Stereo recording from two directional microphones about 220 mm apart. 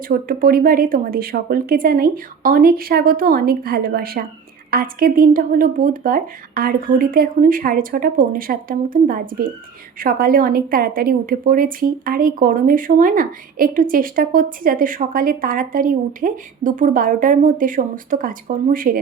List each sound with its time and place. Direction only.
0.1 s a woman's voice: 40° right (ahead or behind)